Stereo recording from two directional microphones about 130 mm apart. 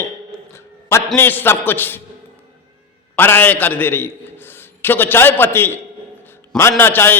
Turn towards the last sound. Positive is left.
turn(degrees=15)  # may be behind; listen again after turning